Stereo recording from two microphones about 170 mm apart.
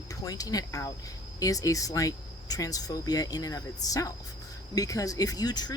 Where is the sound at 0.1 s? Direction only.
20° left (ahead or behind).